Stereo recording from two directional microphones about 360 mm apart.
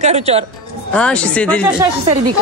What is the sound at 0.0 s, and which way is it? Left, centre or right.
Speech, centre.